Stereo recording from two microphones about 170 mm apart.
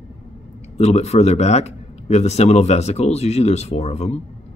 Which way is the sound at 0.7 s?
40° left (ahead or behind).